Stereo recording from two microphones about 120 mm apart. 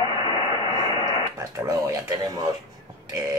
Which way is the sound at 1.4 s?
30° right (ahead or behind).